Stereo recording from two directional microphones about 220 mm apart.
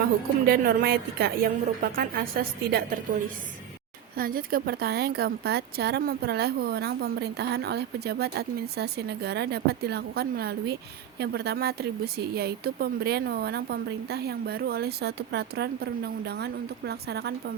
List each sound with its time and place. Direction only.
0.4 s speech: 45° right (ahead or behind)